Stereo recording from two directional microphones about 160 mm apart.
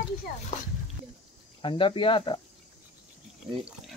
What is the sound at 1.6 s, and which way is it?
Speech, 30° left (ahead or behind).